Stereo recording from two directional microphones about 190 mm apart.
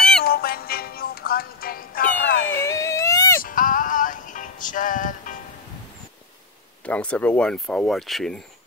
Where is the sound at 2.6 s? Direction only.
15° left (ahead or behind).